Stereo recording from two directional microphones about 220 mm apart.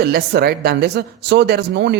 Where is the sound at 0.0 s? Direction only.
45° right (ahead or behind).